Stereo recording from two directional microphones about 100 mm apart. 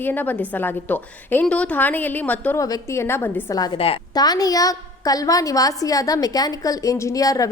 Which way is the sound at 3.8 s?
75° left (ahead or behind).